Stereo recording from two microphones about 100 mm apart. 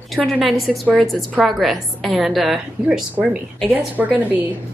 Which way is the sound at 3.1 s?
15° right (ahead or behind).